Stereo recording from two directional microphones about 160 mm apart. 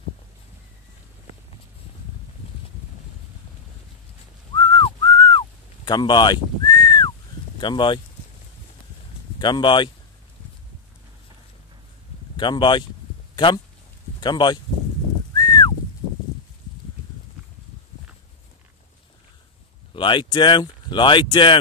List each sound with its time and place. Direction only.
4.6 s whistling: 30° left (ahead or behind)
5.9 s speech: 25° left (ahead or behind)
9.4 s speech: 30° left (ahead or behind)
12.4 s speech: 30° left (ahead or behind)
14.2 s speech: 30° left (ahead or behind)
15.3 s a sound: 25° left (ahead or behind)
19.9 s speech: 30° left (ahead or behind)